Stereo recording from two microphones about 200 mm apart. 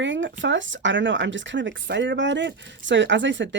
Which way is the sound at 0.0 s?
65° right (ahead or behind).